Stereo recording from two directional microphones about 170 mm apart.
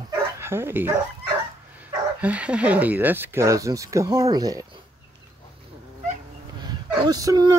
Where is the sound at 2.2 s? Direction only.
5° right (ahead or behind).